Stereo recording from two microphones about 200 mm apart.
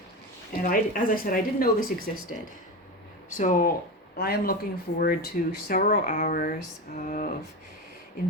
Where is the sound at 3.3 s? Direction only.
40° left (ahead or behind).